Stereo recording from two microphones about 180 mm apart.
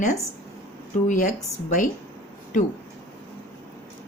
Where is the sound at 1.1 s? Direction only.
45° left (ahead or behind).